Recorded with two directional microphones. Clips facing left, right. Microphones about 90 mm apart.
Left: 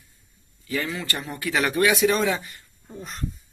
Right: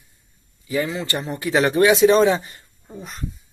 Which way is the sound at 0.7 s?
20° right (ahead or behind).